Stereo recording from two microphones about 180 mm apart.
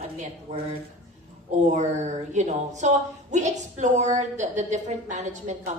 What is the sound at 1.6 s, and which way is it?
Speech, 40° right (ahead or behind).